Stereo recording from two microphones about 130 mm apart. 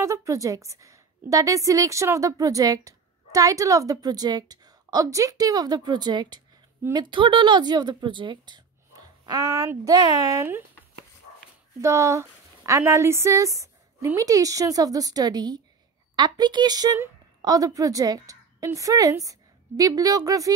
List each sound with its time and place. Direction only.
0.0 s a woman's voice: 25° right (ahead or behind)
11.8 s a woman's voice: 20° right (ahead or behind)